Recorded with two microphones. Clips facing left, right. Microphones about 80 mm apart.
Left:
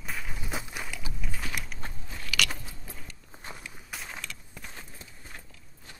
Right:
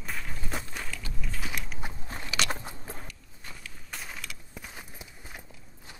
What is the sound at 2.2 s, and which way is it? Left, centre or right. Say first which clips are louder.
Keys jangling: even; right.